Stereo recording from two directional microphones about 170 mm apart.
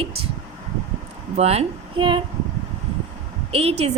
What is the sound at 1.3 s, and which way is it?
Speech, 35° right (ahead or behind).